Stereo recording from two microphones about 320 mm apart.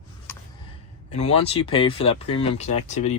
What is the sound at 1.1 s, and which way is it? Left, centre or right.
Speech, centre.